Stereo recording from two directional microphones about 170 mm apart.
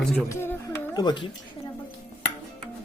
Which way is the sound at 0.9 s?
25° left (ahead or behind).